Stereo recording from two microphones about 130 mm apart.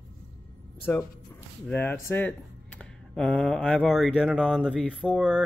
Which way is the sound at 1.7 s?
15° left (ahead or behind).